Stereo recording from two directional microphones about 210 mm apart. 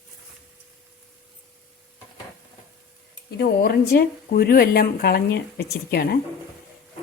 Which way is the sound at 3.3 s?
50° left (ahead or behind).